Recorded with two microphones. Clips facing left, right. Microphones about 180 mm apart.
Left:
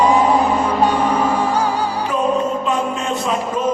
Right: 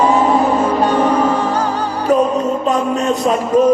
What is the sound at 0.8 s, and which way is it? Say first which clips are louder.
Music: right 3 dB; 10° left (ahead or behind).